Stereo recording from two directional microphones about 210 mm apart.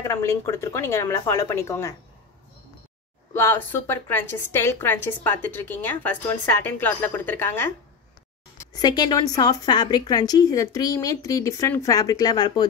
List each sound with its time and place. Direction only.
0.0 s a woman's voice: 15° left (ahead or behind)
3.3 s a woman's voice: 10° left (ahead or behind)
8.7 s a woman's voice: 20° left (ahead or behind)